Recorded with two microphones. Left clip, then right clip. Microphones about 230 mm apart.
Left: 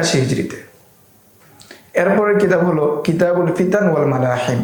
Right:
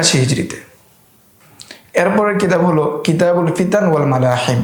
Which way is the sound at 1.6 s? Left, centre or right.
Right.